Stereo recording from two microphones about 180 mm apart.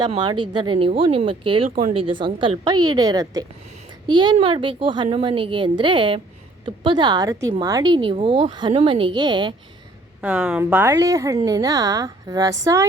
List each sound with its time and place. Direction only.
0.1 s a woman's voice: 25° right (ahead or behind)
10.2 s a woman's voice: 5° right (ahead or behind)